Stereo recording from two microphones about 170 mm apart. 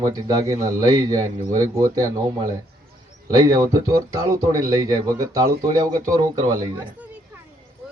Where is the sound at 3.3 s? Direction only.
20° right (ahead or behind).